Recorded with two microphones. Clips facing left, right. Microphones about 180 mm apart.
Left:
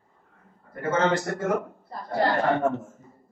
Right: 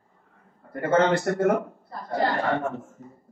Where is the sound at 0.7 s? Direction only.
60° right (ahead or behind).